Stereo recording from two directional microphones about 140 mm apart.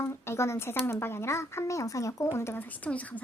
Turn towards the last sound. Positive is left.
turn(degrees=10)  # may be behind; listen again after turning